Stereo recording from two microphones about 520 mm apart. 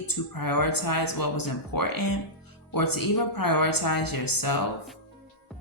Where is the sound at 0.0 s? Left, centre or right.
Left.